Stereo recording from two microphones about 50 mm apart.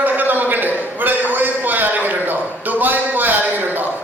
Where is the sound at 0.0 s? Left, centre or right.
Right.